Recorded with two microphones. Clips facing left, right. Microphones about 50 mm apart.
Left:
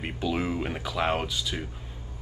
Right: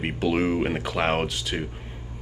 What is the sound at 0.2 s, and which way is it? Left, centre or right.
Speech, right.